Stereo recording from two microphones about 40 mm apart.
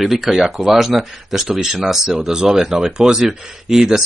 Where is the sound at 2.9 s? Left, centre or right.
Right.